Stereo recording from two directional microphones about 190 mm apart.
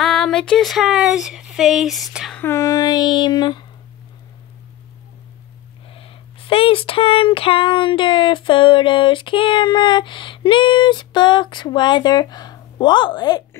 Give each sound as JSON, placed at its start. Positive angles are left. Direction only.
{"t": 0.0, "sound": "child singing", "side_deg": 5}
{"t": 2.4, "sound": "speech", "side_deg": 15}
{"t": 5.9, "sound": "speech", "side_deg": 30}